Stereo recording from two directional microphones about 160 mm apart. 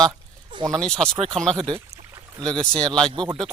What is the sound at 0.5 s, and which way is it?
Speech, 30° right (ahead or behind).